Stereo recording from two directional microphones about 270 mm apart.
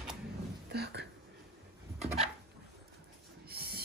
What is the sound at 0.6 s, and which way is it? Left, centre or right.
Speech, right.